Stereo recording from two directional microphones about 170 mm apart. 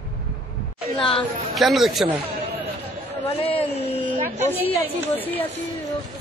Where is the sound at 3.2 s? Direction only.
35° left (ahead or behind).